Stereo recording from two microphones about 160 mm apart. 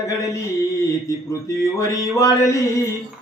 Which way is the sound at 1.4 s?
20° left (ahead or behind).